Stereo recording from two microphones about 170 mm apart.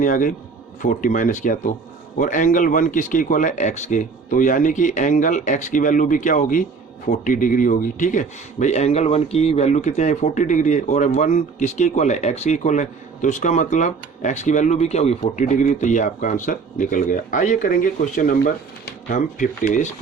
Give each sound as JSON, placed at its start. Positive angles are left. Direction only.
{"t": 0.0, "sound": "speech", "side_deg": 50}